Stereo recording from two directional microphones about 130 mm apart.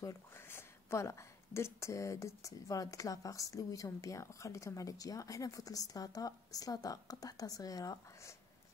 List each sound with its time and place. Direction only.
0.0 s speech: 20° left (ahead or behind)